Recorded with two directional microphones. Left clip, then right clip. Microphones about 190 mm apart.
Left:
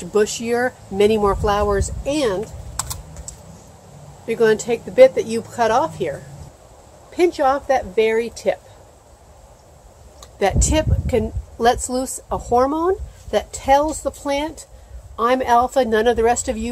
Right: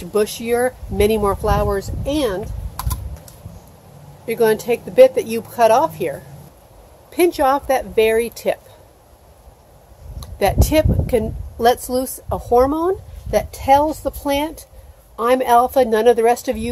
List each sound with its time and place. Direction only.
0.0 s a woman's voice: 10° right (ahead or behind)
2.7 s typing: centre (ahead or behind)
4.3 s speech: 15° right (ahead or behind)
7.1 s speech: 35° right (ahead or behind)
10.2 s a woman's voice: 20° right (ahead or behind)